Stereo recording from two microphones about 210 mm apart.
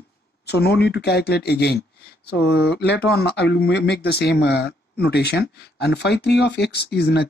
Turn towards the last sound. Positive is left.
turn(degrees=50)  # may be behind; listen again after turning